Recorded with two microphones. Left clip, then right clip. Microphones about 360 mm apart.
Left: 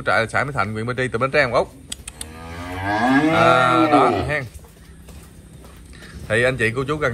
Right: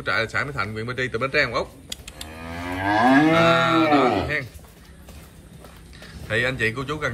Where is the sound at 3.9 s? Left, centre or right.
Centre.